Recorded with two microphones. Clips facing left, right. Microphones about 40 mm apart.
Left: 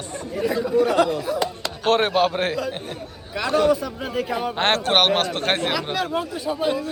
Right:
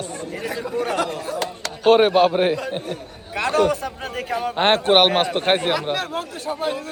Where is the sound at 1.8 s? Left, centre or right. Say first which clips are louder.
Right 5 dB; centre.